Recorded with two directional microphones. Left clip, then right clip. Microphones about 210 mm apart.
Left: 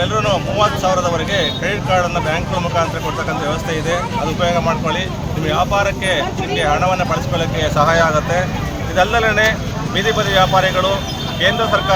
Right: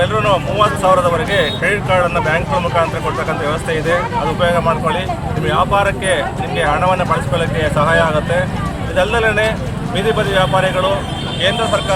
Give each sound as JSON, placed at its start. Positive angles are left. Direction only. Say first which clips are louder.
{"t": 0.0, "sound": "speech", "louder": "right 2 dB", "side_deg": 0}
{"t": 4.4, "sound": "speech", "louder": "right 2 dB", "side_deg": 5}